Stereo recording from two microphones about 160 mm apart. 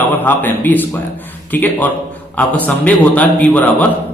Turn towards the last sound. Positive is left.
turn(degrees=10)  # may be behind; listen again after turning